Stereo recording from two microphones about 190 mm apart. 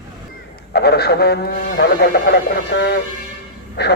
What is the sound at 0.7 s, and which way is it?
A man's voice, 60° left (ahead or behind).